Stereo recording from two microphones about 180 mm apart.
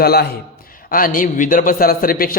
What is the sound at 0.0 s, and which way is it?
A man's voice, 60° left (ahead or behind).